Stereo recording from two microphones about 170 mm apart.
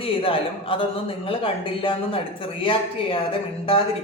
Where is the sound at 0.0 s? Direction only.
30° left (ahead or behind).